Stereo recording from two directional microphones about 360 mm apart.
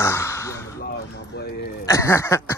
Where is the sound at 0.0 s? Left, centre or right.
Centre.